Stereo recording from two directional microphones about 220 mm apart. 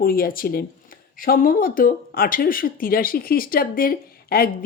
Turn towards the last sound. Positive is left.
turn(degrees=40)  # may be behind; listen again after turning